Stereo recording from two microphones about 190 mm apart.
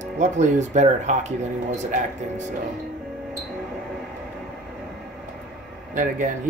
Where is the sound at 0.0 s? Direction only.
40° right (ahead or behind).